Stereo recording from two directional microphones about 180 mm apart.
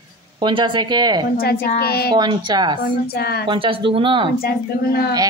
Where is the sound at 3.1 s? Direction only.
60° left (ahead or behind).